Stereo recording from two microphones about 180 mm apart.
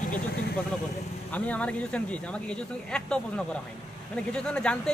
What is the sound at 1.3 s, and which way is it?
Speech, 10° left (ahead or behind).